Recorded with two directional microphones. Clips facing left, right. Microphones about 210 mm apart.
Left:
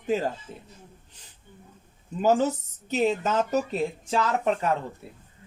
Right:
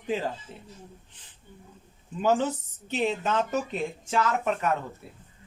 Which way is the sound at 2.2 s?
40° left (ahead or behind).